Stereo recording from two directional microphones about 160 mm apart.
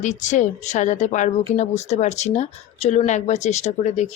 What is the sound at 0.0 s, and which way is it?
Speech, 50° left (ahead or behind).